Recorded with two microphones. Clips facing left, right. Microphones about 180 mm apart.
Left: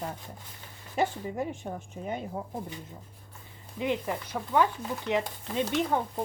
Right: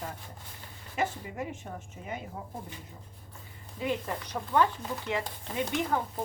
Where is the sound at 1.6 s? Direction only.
35° left (ahead or behind).